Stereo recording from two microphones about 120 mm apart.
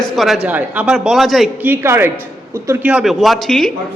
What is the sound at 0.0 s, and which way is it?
Speech, centre (ahead or behind).